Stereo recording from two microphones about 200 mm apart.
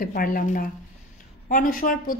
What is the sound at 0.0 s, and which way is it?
A woman's voice, 45° left (ahead or behind).